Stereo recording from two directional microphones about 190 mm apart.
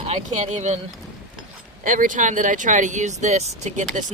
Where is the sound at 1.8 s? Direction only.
45° right (ahead or behind).